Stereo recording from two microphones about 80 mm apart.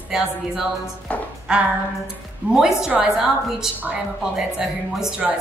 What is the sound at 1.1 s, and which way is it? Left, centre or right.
Speech, centre.